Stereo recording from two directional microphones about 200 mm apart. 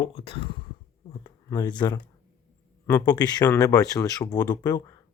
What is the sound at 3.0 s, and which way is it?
Speech, 20° left (ahead or behind).